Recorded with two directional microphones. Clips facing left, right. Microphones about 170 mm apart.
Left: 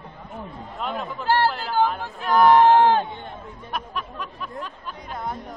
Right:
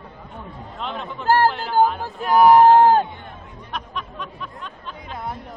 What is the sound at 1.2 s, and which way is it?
Speech, 45° right (ahead or behind).